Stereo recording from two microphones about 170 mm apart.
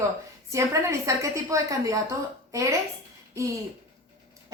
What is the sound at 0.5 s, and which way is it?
A woman's voice, 20° right (ahead or behind).